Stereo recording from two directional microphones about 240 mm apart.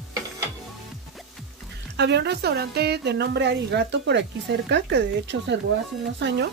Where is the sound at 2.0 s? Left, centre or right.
Right.